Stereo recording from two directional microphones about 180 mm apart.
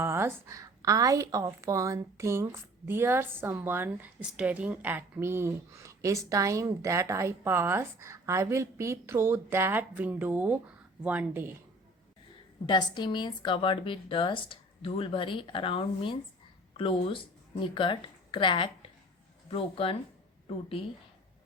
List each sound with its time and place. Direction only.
0.0 s a woman's voice: 15° right (ahead or behind)
12.6 s a woman's voice: 25° left (ahead or behind)